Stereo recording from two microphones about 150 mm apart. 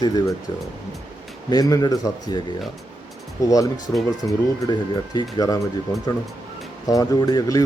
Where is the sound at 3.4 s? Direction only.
20° left (ahead or behind).